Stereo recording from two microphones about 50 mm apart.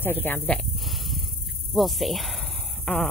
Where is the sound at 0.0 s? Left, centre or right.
Left.